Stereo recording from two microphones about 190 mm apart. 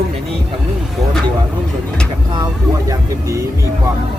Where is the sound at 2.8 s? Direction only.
15° right (ahead or behind).